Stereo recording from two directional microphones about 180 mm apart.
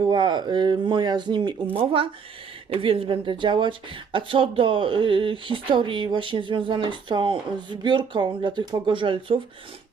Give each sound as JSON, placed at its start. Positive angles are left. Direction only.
{"t": 0.0, "sound": "speech", "side_deg": -25}